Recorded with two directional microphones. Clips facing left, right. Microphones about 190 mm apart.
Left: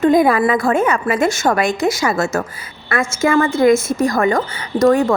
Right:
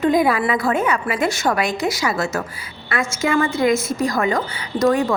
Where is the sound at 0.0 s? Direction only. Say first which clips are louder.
Left 4 dB; 45° left (ahead or behind).